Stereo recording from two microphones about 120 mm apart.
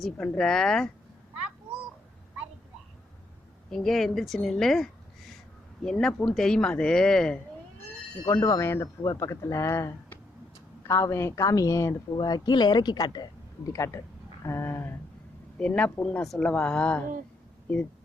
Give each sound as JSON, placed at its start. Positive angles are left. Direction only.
{"t": 0.0, "sound": "speech", "side_deg": 5}
{"t": 3.7, "sound": "speech", "side_deg": 5}
{"t": 8.3, "sound": "a woman's voice", "side_deg": 25}
{"t": 12.1, "sound": "a woman's voice", "side_deg": 35}